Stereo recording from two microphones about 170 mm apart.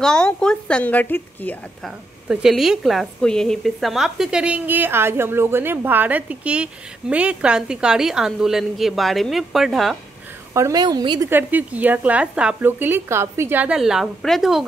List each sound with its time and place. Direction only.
0.0 s a woman's voice: 5° left (ahead or behind)
10.5 s a woman's voice: 20° right (ahead or behind)
11.2 s speech: 10° right (ahead or behind)